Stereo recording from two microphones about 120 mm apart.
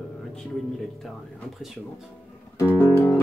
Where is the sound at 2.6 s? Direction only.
20° left (ahead or behind).